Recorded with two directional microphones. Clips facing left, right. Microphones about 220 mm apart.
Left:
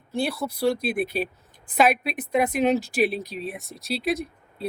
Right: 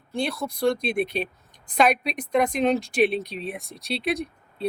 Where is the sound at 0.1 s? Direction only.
5° left (ahead or behind).